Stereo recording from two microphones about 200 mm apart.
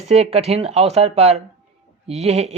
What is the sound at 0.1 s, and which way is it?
Speech, 30° right (ahead or behind).